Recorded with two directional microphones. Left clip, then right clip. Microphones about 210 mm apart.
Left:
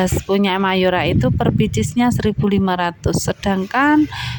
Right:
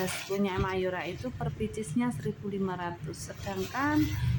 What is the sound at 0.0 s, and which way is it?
Speech, 50° left (ahead or behind).